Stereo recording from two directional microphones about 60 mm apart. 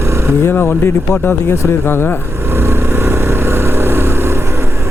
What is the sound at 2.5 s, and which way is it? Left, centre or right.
Vehicle, right.